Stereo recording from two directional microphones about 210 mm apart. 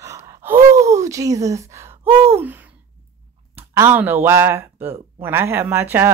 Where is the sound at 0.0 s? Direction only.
15° right (ahead or behind).